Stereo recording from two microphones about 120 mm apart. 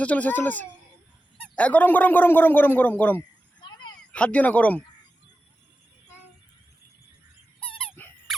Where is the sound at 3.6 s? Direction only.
40° left (ahead or behind).